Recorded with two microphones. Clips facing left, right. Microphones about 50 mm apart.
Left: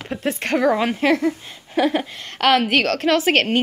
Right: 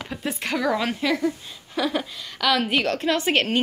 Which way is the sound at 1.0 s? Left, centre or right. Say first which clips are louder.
Left 5 dB; left.